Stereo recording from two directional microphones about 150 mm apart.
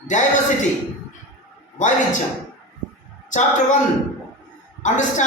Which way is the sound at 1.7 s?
55° left (ahead or behind).